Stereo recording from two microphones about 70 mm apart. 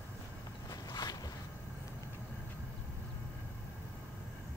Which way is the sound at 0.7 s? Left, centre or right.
Left.